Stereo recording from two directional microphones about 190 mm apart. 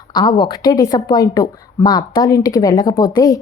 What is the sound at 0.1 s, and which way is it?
A woman's voice, 20° left (ahead or behind).